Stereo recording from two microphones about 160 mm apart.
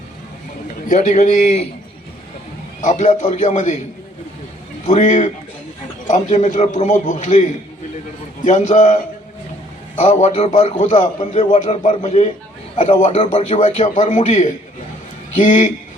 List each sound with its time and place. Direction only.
0.9 s a man's voice: 50° left (ahead or behind)
2.8 s a man's voice: 50° left (ahead or behind)
4.9 s a man's voice: 50° left (ahead or behind)
10.0 s a man's voice: 50° left (ahead or behind)
10.9 s a man's voice: 35° left (ahead or behind); by 14.4 s 50° left (ahead or behind)
15.4 s a man's voice: 55° left (ahead or behind)